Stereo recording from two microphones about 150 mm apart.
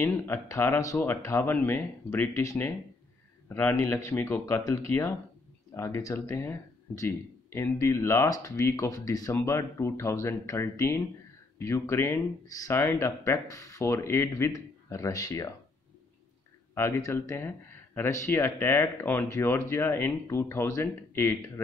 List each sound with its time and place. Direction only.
0.0 s speech: 15° left (ahead or behind)
16.7 s speech: 20° left (ahead or behind)